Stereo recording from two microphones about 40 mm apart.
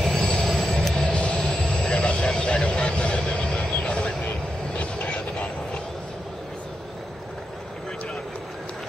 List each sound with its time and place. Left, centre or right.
0.1 s train: centre
0.7 s vehicle: centre
1.0 s vehicle: left
4.7 s train: left